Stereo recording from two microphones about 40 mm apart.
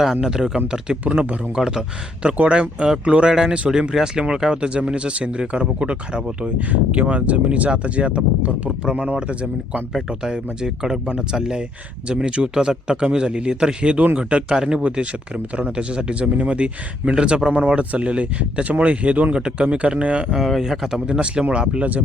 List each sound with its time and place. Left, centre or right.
0.0 s speech: centre
1.0 s speech: right
1.5 s speech: centre
2.2 s speech: right
3.2 s speech: centre
6.6 s speech: right
10.1 s speech: centre
14.5 s speech: centre; by 19.3 s right
19.3 s speech: right
20.6 s speech: centre
21.1 s speech: right